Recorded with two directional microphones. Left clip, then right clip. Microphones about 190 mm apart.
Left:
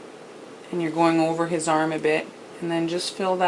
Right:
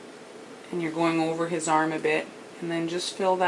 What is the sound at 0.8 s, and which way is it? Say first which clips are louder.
Speech: left 5 dB; 10° left (ahead or behind).